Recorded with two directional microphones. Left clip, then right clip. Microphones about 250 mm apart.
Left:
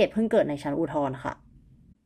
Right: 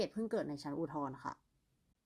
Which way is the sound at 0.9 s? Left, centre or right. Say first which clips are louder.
Left 15 dB; right.